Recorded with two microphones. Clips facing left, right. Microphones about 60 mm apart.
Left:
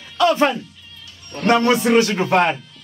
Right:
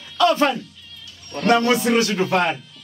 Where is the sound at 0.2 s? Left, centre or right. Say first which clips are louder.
Left 1 dB; centre.